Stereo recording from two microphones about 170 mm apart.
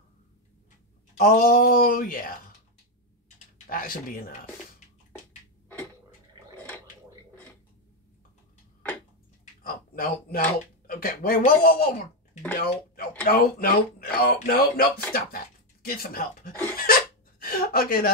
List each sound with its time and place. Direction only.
1.1 s speech: 60° left (ahead or behind)
3.6 s speech: 55° left (ahead or behind)
9.6 s a sound: 60° left (ahead or behind)
10.9 s speech: 60° left (ahead or behind)
15.9 s speech: 60° left (ahead or behind)
16.7 s hiccup: 60° left (ahead or behind)